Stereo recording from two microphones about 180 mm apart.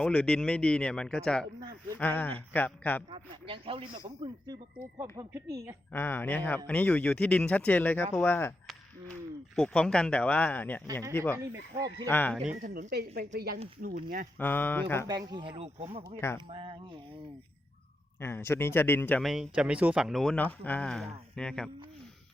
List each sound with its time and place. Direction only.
0.0 s speech: 5° left (ahead or behind)
3.1 s speech: 30° right (ahead or behind)
5.1 s speech: 20° right (ahead or behind)
5.9 s speech: 10° left (ahead or behind)
9.6 s speech: 5° left (ahead or behind)
12.6 s speech: 50° right (ahead or behind)
13.8 s speech: 50° right (ahead or behind)
14.3 s speech: 10° left (ahead or behind)
15.0 s speech: 20° right (ahead or behind)
18.2 s speech: 15° left (ahead or behind)